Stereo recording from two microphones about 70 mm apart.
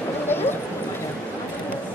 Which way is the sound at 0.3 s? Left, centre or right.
Left.